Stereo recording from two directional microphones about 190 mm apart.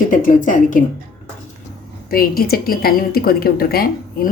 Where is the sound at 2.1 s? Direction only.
50° left (ahead or behind).